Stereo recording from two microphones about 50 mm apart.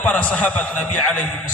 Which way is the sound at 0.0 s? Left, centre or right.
Left.